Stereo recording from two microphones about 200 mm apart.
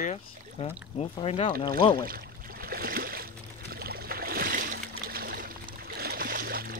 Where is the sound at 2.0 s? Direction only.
50° right (ahead or behind).